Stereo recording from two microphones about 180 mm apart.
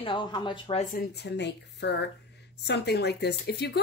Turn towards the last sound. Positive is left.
turn(degrees=65)  # may be behind; listen again after turning